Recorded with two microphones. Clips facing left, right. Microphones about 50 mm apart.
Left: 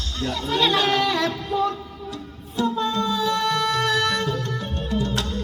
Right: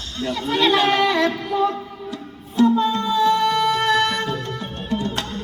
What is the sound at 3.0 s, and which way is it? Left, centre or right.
Music, centre.